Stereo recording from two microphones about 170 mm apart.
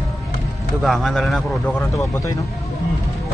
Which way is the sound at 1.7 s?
15° left (ahead or behind).